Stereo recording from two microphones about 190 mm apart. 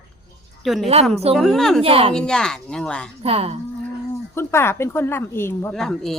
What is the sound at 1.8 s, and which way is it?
Speech, 30° right (ahead or behind).